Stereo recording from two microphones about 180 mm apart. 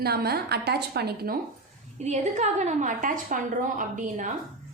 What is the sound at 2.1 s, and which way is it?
A woman's voice, 40° right (ahead or behind).